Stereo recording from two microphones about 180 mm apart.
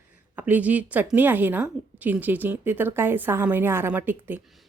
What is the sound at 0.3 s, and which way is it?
A woman's voice, 10° right (ahead or behind).